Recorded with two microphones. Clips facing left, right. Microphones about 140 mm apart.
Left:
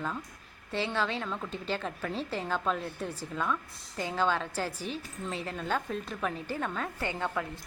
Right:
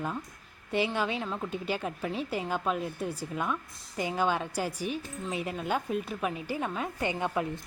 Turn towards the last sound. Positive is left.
turn(degrees=-20)  # may be behind; listen again after turning